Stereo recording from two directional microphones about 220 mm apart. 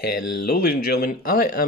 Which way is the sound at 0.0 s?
45° left (ahead or behind).